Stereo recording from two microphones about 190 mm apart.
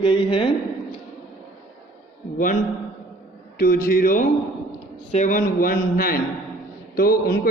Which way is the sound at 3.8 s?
50° left (ahead or behind).